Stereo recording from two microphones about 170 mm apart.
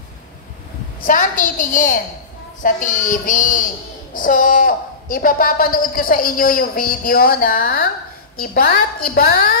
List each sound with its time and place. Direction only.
1.0 s a woman's voice: 50° left (ahead or behind)